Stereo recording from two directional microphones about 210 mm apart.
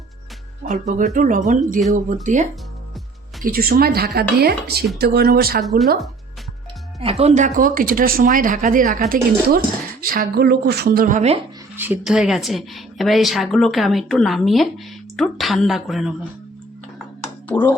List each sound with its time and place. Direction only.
0.6 s speech: 35° right (ahead or behind)
7.0 s speech: 30° right (ahead or behind)
11.8 s a woman's voice: 5° right (ahead or behind)
17.5 s speech: 10° left (ahead or behind)